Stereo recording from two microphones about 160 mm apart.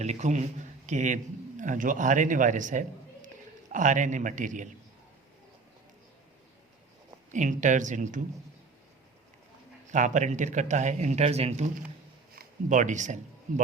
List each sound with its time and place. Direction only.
0.0 s a man's voice: 45° right (ahead or behind)
7.3 s speech: 50° right (ahead or behind)
9.8 s speech: 50° right (ahead or behind)